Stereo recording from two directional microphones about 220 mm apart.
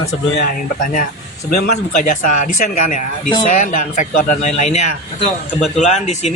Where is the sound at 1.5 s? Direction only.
35° left (ahead or behind).